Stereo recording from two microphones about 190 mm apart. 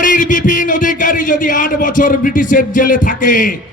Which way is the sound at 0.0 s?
45° left (ahead or behind).